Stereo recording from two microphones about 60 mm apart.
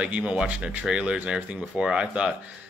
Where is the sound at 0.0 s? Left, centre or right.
Centre.